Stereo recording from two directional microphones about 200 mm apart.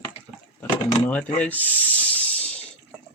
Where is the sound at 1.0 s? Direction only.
5° left (ahead or behind).